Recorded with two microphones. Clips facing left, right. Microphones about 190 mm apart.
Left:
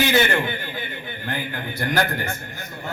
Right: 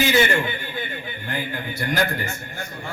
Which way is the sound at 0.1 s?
55° left (ahead or behind).